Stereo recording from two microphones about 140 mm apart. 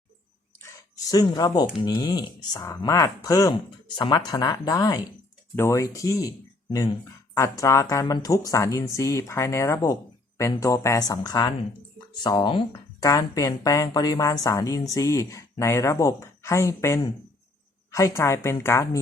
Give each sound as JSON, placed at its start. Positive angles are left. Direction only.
{"t": 0.6, "sound": "speech", "side_deg": 25}
{"t": 7.3, "sound": "speech", "side_deg": 20}